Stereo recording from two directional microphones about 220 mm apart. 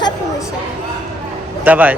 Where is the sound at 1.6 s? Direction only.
5° right (ahead or behind).